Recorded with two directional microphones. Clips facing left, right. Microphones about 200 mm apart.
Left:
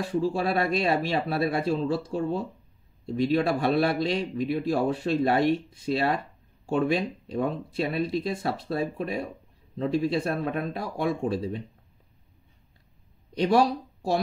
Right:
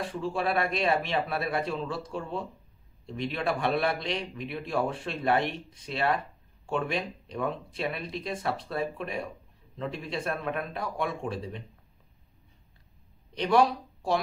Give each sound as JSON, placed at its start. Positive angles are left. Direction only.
{"t": 0.0, "sound": "speech", "side_deg": 40}
{"t": 13.4, "sound": "speech", "side_deg": 40}